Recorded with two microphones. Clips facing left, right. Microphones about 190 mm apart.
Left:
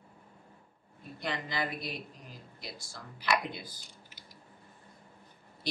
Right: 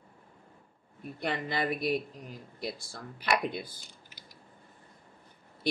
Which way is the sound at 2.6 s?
55° right (ahead or behind).